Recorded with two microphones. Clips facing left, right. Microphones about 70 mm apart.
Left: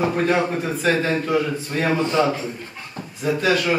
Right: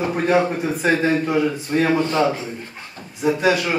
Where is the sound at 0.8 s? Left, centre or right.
Right.